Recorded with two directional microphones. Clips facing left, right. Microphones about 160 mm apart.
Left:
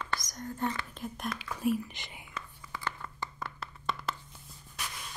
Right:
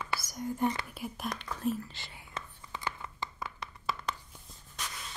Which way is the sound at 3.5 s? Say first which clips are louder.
Left 1 dB; 5° left (ahead or behind).